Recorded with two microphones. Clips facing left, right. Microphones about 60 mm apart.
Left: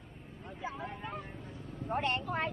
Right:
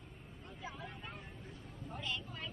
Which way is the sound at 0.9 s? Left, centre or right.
Left.